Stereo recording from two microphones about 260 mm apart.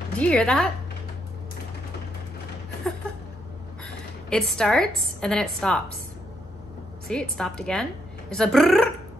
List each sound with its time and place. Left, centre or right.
0.2 s a woman's voice: centre
3.8 s a woman's voice: centre
7.1 s a woman's voice: centre